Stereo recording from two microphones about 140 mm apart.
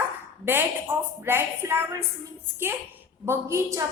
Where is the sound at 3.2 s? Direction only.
20° right (ahead or behind).